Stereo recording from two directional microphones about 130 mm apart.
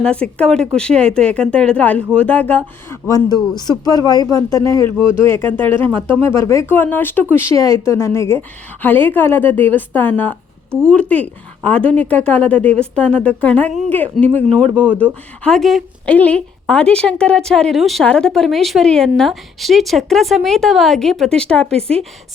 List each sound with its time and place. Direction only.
0.0 s speech: 10° left (ahead or behind)
3.1 s a woman's voice: 30° left (ahead or behind); by 21.9 s 5° left (ahead or behind)